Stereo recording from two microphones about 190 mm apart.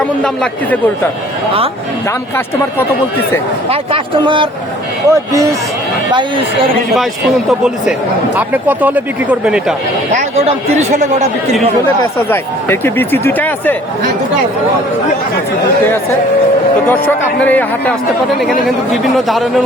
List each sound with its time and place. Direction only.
3.7 s speech: 30° right (ahead or behind)
5.0 s speech: 15° right (ahead or behind)
6.9 s a man's voice: centre (ahead or behind)
10.8 s speech: 35° right (ahead or behind)
12.3 s speech: 10° left (ahead or behind)
17.4 s speech: 10° left (ahead or behind)
19.1 s a man's voice: centre (ahead or behind)